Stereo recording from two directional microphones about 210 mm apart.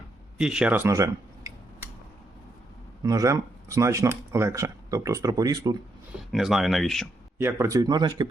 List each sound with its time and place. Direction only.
0.3 s a sound: 5° right (ahead or behind)
3.0 s speech: 15° right (ahead or behind)
6.3 s speech: centre (ahead or behind)
7.3 s speech: 10° right (ahead or behind)